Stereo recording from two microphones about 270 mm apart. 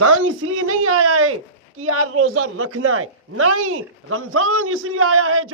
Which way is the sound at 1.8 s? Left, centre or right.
Right.